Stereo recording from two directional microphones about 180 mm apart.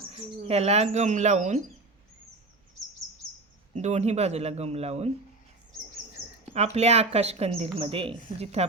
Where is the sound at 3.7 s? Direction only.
40° right (ahead or behind).